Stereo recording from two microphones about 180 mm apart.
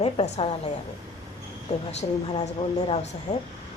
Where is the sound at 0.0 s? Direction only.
35° left (ahead or behind).